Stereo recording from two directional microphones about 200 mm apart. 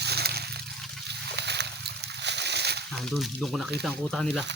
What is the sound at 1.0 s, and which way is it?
Splash, 60° right (ahead or behind).